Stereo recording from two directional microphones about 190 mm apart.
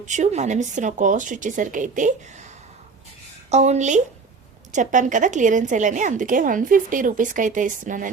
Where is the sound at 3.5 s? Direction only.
35° right (ahead or behind).